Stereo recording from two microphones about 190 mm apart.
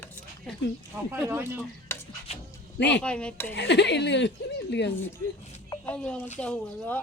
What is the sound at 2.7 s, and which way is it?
Speech, 65° left (ahead or behind).